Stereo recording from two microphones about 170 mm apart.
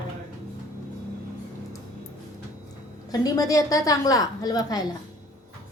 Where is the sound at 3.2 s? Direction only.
20° left (ahead or behind).